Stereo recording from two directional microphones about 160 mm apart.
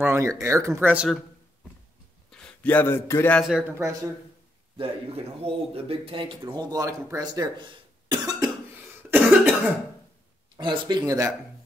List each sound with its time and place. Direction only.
0.0 s speech: 15° right (ahead or behind)
2.3 s a man's voice: 5° left (ahead or behind)
3.4 s speech: 5° right (ahead or behind)
3.7 s speech: 20° right (ahead or behind)
4.7 s speech: 35° right (ahead or behind)
9.1 s cough: 10° right (ahead or behind)
10.6 s speech: 25° right (ahead or behind)